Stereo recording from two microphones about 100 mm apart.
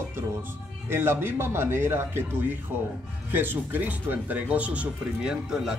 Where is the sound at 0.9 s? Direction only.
25° right (ahead or behind).